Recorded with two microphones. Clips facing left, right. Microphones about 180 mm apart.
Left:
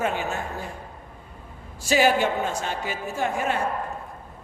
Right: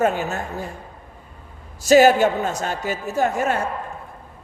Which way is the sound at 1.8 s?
45° right (ahead or behind).